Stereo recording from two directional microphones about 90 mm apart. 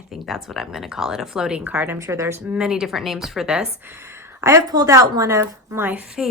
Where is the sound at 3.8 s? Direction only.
25° right (ahead or behind); by 6.3 s 10° right (ahead or behind).